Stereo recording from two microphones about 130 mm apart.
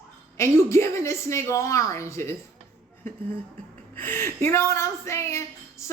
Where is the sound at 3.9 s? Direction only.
15° left (ahead or behind).